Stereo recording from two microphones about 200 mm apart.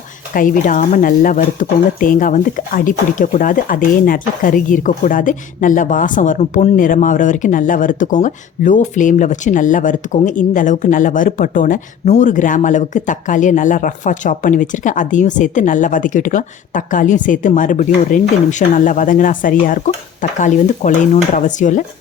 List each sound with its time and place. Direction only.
0.3 s speech: 45° left (ahead or behind)